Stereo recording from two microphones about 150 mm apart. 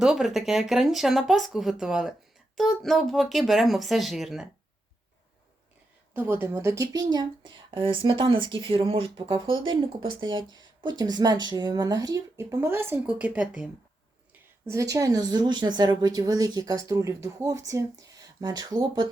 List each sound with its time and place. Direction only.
0.0 s speech: 5° right (ahead or behind)
6.1 s a woman's voice: 15° right (ahead or behind)
14.7 s speech: 20° right (ahead or behind)